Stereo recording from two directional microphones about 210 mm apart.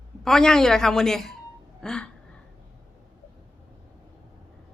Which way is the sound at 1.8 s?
5° left (ahead or behind).